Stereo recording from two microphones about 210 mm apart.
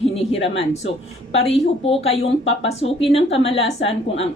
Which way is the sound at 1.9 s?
30° left (ahead or behind).